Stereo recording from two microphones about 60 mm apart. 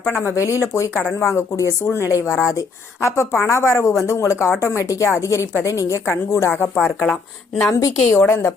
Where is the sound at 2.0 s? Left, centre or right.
Left.